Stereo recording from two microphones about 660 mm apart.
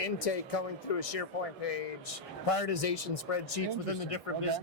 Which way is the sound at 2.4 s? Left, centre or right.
Left.